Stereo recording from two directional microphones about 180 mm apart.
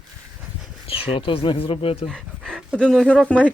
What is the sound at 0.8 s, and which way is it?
Speech, 30° left (ahead or behind).